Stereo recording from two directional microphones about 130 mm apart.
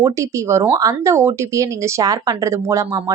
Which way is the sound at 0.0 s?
25° right (ahead or behind).